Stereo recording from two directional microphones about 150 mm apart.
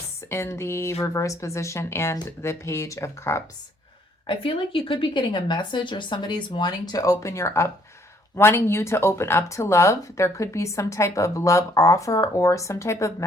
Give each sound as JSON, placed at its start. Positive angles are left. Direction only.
{"t": 0.3, "sound": "speech", "side_deg": 20}
{"t": 4.3, "sound": "speech", "side_deg": 35}